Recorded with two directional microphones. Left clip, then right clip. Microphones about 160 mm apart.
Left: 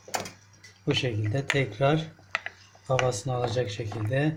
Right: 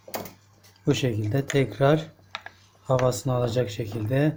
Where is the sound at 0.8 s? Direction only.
25° right (ahead or behind).